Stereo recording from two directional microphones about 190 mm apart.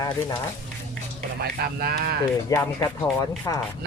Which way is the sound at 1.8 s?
55° right (ahead or behind).